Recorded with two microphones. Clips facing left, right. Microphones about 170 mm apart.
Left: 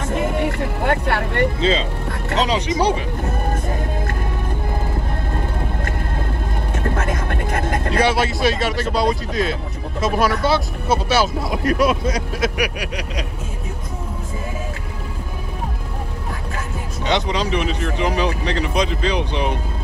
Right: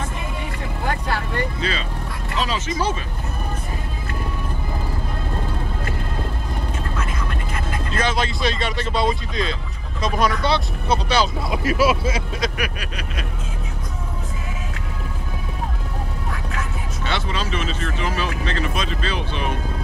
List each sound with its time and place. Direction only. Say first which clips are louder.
0.1 s vehicle: left 10 dB; 65° left (ahead or behind)
1.6 s speech: left 7 dB; 20° left (ahead or behind)
6.8 s vehicle: left 6 dB; 50° left (ahead or behind)
8.0 s speech: left 4 dB; 10° left (ahead or behind)
12.5 s speech: left 5 dB; 15° left (ahead or behind)
17.0 s speech: left 6 dB; 15° left (ahead or behind)